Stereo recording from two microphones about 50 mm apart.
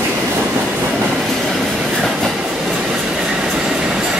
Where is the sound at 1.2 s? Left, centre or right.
Centre.